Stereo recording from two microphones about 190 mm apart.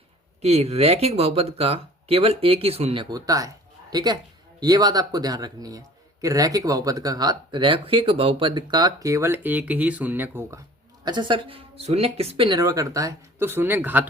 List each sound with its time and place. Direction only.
0.4 s speech: 35° right (ahead or behind); by 10.6 s 10° right (ahead or behind)
11.0 s speech: 25° right (ahead or behind)